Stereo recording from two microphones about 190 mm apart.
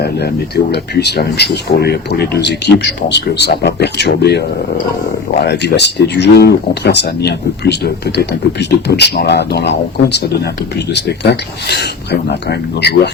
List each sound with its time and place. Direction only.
0.0 s speech: 60° left (ahead or behind)